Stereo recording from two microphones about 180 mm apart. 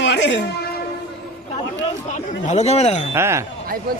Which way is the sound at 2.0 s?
40° left (ahead or behind).